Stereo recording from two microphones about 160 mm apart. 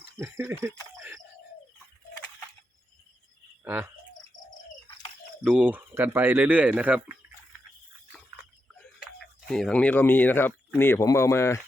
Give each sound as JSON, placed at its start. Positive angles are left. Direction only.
{"t": 0.2, "sound": "speech", "side_deg": -15}
{"t": 3.6, "sound": "cricket", "side_deg": -15}
{"t": 5.4, "sound": "speech", "side_deg": -5}
{"t": 9.2, "sound": "speech", "side_deg": 0}